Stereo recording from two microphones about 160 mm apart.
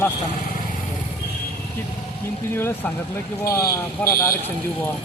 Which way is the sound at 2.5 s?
15° left (ahead or behind).